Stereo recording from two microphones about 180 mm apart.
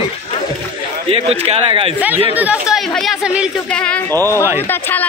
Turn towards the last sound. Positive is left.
turn(degrees=10)  # may be behind; listen again after turning